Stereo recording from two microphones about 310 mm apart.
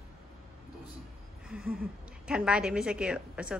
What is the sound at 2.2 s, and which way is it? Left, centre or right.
A woman's voice, centre.